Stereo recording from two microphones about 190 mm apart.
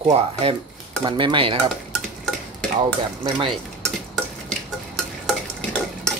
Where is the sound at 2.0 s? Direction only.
Centre (ahead or behind).